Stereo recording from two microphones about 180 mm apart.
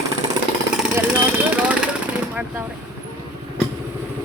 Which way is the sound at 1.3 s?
10° right (ahead or behind).